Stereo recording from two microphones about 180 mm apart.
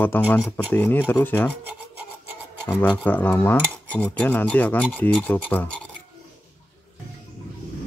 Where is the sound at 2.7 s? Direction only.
10° left (ahead or behind).